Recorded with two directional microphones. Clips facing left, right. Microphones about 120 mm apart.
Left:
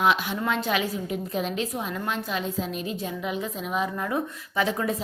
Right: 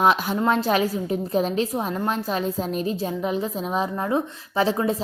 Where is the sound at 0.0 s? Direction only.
40° right (ahead or behind).